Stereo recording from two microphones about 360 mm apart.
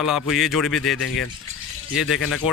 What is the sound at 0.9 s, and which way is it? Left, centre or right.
Speech, left.